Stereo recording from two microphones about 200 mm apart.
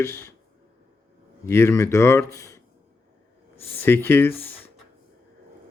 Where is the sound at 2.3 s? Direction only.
15° left (ahead or behind).